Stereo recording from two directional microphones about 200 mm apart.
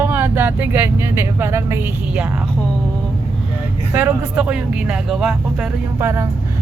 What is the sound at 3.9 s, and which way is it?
A man's voice, 5° right (ahead or behind).